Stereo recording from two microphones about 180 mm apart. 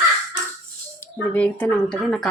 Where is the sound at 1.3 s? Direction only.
10° left (ahead or behind).